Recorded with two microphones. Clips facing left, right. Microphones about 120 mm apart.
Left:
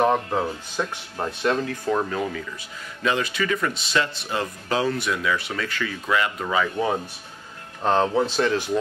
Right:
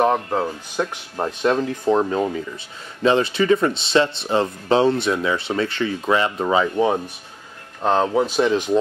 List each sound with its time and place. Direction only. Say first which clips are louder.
0.0 s speech: right 2 dB; 10° right (ahead or behind)
7.8 s speech: right 2 dB; 5° right (ahead or behind)